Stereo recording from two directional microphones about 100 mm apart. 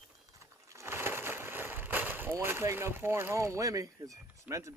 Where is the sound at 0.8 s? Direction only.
25° right (ahead or behind).